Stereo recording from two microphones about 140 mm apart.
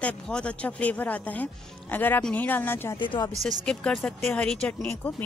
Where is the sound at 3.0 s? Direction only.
35° left (ahead or behind).